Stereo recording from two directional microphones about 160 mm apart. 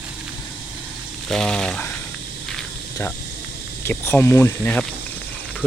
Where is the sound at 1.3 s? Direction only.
5° left (ahead or behind).